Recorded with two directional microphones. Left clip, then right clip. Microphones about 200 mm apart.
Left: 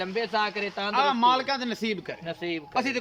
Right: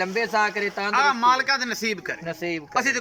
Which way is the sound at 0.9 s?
30° left (ahead or behind).